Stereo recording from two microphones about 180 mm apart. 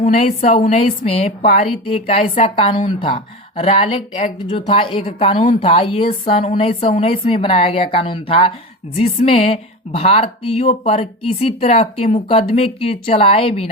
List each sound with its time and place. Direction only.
0.1 s a woman's voice: 50° left (ahead or behind)
0.6 s a woman's voice: 35° left (ahead or behind)